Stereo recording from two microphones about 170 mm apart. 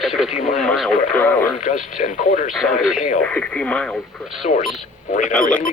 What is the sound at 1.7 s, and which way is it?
Speech, 50° left (ahead or behind).